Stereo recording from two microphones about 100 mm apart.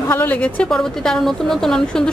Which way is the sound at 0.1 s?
15° left (ahead or behind).